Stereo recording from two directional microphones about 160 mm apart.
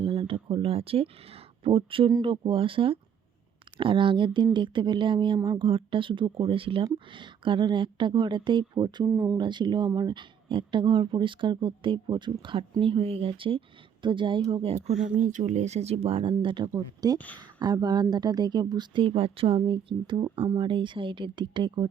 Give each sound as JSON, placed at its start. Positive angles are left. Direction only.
{"t": 0.0, "sound": "speech", "side_deg": -35}
{"t": 9.0, "sound": "speech", "side_deg": -15}
{"t": 9.4, "sound": "speech", "side_deg": -30}
{"t": 15.2, "sound": "speech", "side_deg": -50}
{"t": 17.2, "sound": "speech", "side_deg": 10}
{"t": 17.6, "sound": "speech", "side_deg": -25}